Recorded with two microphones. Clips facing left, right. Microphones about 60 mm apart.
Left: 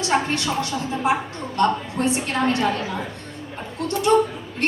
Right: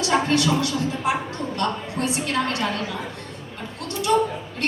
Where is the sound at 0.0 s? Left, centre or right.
Left.